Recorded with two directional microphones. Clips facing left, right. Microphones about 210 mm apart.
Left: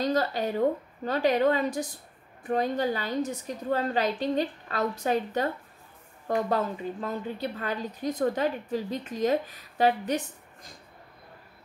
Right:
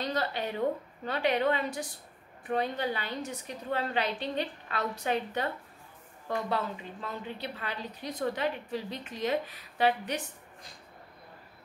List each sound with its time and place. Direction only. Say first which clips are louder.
0.0 s a woman's voice: left 6 dB; 40° left (ahead or behind)